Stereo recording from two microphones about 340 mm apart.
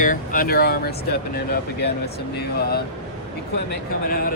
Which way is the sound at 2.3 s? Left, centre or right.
Left.